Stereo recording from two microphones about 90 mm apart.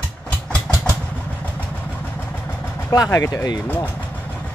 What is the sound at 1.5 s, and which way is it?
Vehicle, 20° left (ahead or behind).